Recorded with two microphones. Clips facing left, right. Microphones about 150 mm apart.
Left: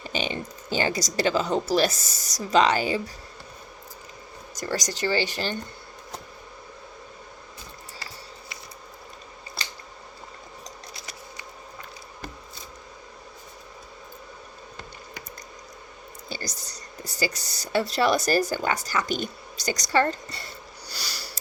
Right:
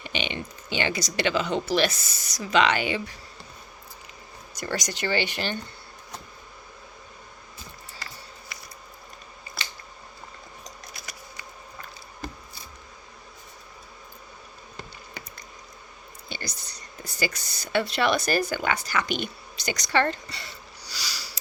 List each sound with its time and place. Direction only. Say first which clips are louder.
0.0 s speech: left 2 dB; 40° left (ahead or behind)
4.5 s speech: left 1 dB; 40° left (ahead or behind)
10.6 s keys jangling: left 2 dB; 25° left (ahead or behind)
16.3 s speech: left 2 dB; 40° left (ahead or behind); by 21.3 s 55° left (ahead or behind)